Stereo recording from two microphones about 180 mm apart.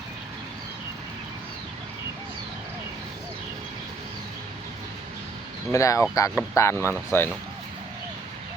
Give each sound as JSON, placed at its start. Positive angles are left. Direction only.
{"t": 5.7, "sound": "speech", "side_deg": 15}